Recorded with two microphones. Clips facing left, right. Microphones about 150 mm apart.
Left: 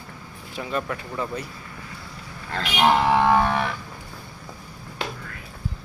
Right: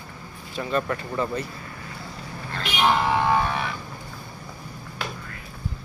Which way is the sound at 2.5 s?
70° left (ahead or behind).